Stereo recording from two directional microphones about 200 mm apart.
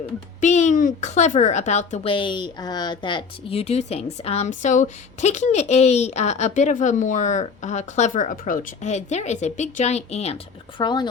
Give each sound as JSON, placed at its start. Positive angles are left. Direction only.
{"t": 0.4, "sound": "speech", "side_deg": 35}